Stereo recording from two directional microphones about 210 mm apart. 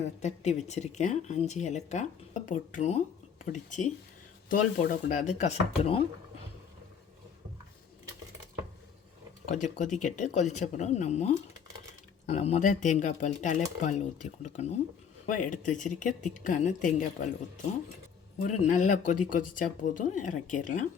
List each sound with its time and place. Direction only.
0.2 s speech: 35° left (ahead or behind)
9.5 s speech: 35° left (ahead or behind)
18.3 s speech: 35° left (ahead or behind)